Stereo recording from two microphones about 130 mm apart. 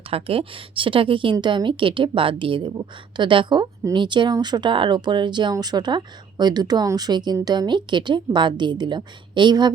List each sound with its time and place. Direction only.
0.1 s a woman's voice: 45° right (ahead or behind)